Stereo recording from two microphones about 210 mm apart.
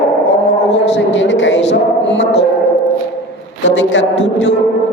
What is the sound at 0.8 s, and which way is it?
Music, 60° left (ahead or behind).